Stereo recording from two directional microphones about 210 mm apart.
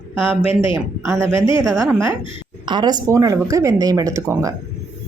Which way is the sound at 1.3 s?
20° left (ahead or behind).